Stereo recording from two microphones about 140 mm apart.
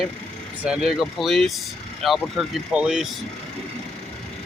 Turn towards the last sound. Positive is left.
turn(degrees=-5)  # may be behind; listen again after turning